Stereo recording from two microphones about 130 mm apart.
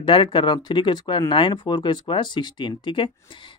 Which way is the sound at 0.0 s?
40° left (ahead or behind).